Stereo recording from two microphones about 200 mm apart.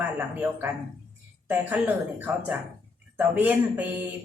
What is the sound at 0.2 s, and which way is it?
A woman's voice, 10° right (ahead or behind).